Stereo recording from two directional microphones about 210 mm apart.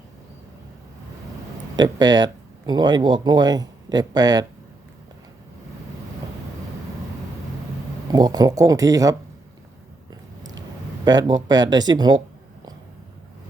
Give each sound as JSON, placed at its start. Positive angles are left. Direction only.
{"t": 1.7, "sound": "speech", "side_deg": -20}
{"t": 8.1, "sound": "speech", "side_deg": -20}
{"t": 11.0, "sound": "speech", "side_deg": -20}